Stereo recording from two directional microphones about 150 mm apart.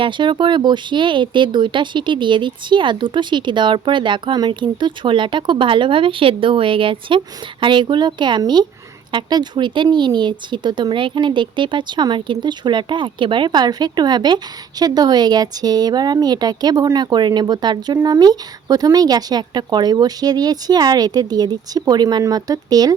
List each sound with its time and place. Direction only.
0.0 s speech: 30° right (ahead or behind)